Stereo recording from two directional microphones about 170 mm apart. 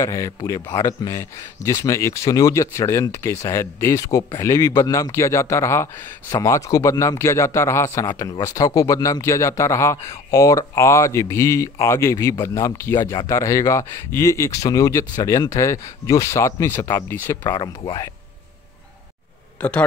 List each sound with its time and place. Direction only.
0.0 s speech: 15° left (ahead or behind)